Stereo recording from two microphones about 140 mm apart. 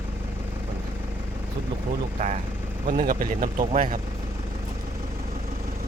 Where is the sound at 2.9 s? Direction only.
70° right (ahead or behind).